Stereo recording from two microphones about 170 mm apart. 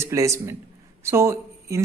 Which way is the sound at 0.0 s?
20° right (ahead or behind).